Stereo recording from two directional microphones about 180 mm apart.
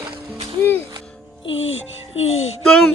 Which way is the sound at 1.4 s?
90° left.